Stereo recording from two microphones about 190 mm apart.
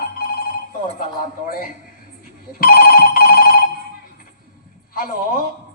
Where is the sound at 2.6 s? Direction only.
50° left (ahead or behind).